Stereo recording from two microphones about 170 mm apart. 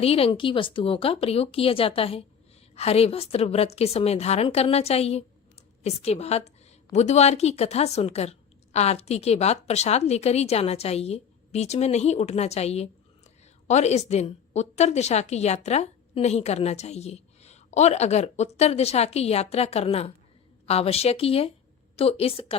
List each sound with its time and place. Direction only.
0.0 s a woman's voice: 35° left (ahead or behind)